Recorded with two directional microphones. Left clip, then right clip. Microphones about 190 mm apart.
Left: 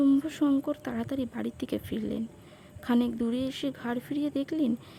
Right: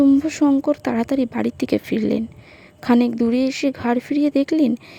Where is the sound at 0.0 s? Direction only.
25° right (ahead or behind).